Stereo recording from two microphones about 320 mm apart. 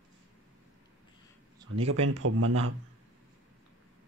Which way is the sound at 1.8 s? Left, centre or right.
Right.